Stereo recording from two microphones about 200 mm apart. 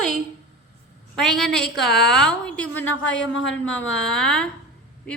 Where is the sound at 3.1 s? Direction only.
70° left (ahead or behind).